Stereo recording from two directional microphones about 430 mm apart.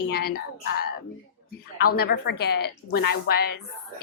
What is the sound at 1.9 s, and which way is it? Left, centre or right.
A woman's voice, left.